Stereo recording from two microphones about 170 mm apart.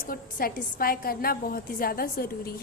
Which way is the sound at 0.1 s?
60° left (ahead or behind).